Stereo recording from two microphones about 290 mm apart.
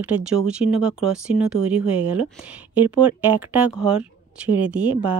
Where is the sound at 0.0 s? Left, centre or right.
Centre.